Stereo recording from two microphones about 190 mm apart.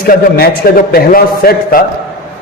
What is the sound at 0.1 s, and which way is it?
A man's voice, 55° left (ahead or behind).